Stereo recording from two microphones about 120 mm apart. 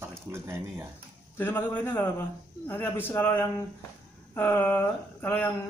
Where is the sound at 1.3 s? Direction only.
15° left (ahead or behind).